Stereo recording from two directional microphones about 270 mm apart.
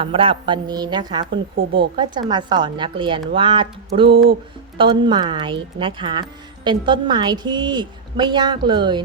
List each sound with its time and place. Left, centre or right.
0.0 s a woman's voice: centre
3.3 s a sound: centre
4.8 s a woman's voice: centre